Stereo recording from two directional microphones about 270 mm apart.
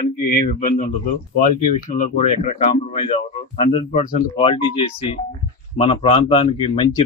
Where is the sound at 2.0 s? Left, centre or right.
Left.